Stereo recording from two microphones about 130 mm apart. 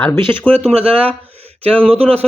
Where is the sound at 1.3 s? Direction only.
50° right (ahead or behind).